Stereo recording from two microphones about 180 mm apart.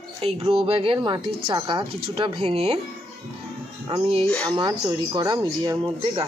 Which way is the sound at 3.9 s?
30° right (ahead or behind).